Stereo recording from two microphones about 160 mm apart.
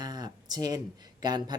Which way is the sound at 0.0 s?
25° right (ahead or behind).